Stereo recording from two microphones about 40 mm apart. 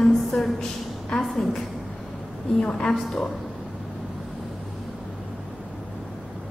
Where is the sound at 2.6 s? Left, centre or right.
Left.